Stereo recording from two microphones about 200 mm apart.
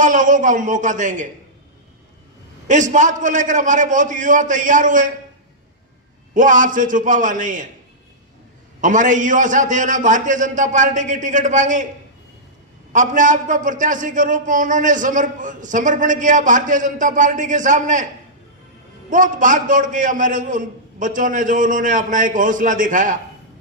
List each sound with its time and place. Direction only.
0.0 s a man's voice: 40° right (ahead or behind)
2.6 s a man's voice: 40° right (ahead or behind)
6.3 s a man's voice: 40° right (ahead or behind)
8.8 s a man's voice: 40° right (ahead or behind)
12.9 s a man's voice: 40° right (ahead or behind)
19.1 s a man's voice: 40° right (ahead or behind)